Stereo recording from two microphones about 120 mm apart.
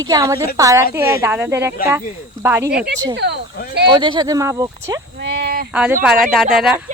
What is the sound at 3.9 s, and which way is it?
Speech, 40° right (ahead or behind).